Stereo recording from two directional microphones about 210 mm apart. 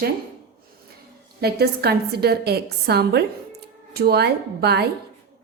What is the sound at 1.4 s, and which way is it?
A woman's voice, 50° right (ahead or behind).